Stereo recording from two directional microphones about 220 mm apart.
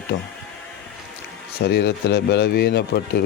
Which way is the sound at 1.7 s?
45° left (ahead or behind).